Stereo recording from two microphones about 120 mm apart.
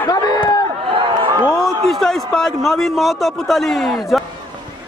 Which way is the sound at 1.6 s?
Centre (ahead or behind).